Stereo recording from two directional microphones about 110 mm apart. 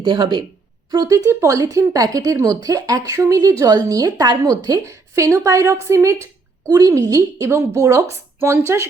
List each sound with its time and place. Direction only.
0.0 s speech: 45° right (ahead or behind)
0.9 s a woman's voice: 35° right (ahead or behind)